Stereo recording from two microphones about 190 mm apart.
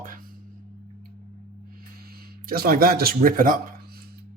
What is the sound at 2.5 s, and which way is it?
Speech, 50° right (ahead or behind).